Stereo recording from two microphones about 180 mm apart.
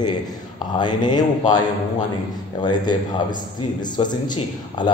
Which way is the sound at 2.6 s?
25° left (ahead or behind).